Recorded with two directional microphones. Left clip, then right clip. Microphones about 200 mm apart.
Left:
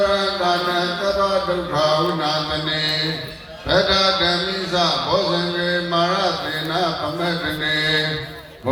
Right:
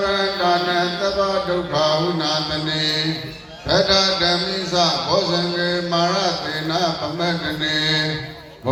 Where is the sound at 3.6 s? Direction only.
5° right (ahead or behind).